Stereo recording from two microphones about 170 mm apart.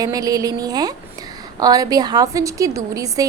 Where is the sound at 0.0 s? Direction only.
20° right (ahead or behind).